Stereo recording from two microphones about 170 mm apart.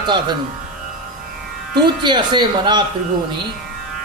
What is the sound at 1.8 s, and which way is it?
A man's voice, 25° right (ahead or behind).